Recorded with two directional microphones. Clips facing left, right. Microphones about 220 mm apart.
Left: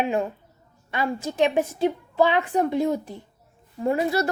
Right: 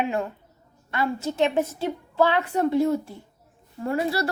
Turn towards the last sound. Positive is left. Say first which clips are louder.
# left 2 dB
turn(degrees=20)  # may be behind; listen again after turning